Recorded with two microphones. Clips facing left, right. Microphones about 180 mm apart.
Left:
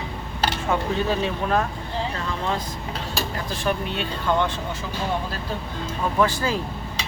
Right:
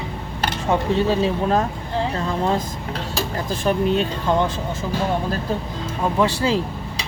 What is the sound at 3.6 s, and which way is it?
Speech, 40° right (ahead or behind).